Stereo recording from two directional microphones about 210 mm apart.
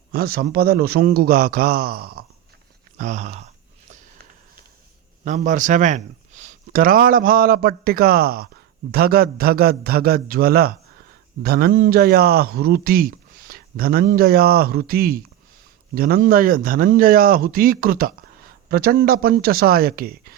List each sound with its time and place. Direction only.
0.1 s a man's voice: 45° right (ahead or behind)
3.0 s speech: 35° right (ahead or behind)
5.2 s a man's voice: 35° right (ahead or behind)